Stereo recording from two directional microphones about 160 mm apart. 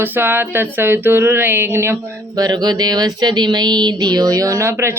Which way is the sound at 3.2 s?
25° right (ahead or behind).